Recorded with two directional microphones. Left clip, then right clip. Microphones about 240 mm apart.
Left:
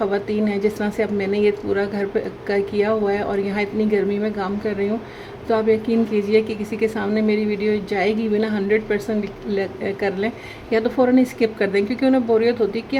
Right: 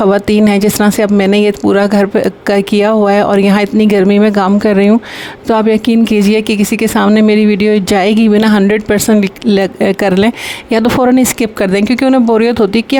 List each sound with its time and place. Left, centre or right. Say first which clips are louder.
0.1 s speech: right 12 dB; right